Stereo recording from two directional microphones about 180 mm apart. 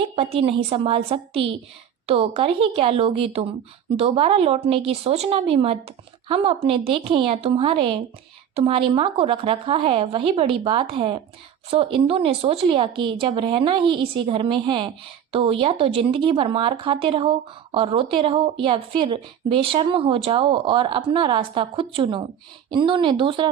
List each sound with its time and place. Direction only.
0.2 s a woman's voice: 30° right (ahead or behind)